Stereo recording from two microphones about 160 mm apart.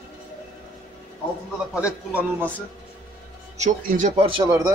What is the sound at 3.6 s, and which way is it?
Speech, 50° right (ahead or behind).